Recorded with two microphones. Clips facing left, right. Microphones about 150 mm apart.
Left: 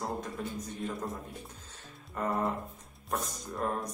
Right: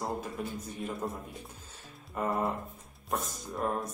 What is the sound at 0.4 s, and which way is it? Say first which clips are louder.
Speech: right 1 dB; 10° right (ahead or behind).